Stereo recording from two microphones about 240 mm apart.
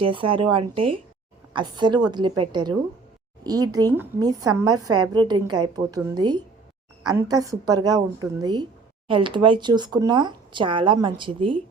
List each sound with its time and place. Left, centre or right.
0.0 s a woman's voice: right
4.8 s a woman's voice: right
5.1 s a woman's voice: centre